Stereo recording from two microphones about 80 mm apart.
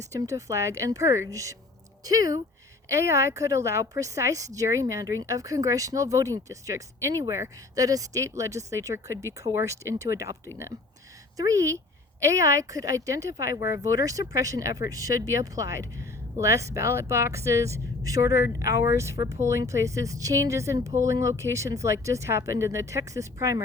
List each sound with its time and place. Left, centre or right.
0.1 s a woman's voice: right
2.9 s speech: right
11.3 s a woman's voice: right